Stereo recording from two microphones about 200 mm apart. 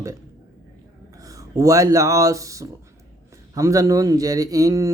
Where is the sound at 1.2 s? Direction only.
15° right (ahead or behind).